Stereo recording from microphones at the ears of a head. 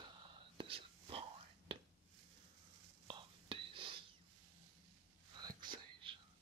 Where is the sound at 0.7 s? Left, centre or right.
Right.